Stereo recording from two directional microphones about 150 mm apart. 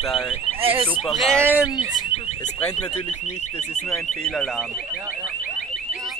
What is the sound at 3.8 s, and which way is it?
Speech, 5° left (ahead or behind).